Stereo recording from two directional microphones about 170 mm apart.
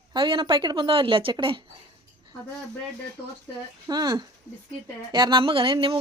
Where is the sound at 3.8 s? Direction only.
25° right (ahead or behind).